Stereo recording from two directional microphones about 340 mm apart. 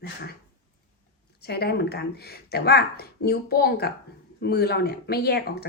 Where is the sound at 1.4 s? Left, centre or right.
Left.